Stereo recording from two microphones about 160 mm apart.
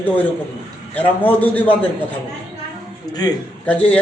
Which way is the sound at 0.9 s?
10° left (ahead or behind).